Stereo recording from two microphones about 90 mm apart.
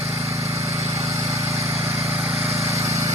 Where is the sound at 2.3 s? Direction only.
90° right.